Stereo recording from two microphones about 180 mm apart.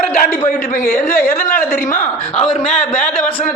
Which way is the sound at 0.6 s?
45° left (ahead or behind).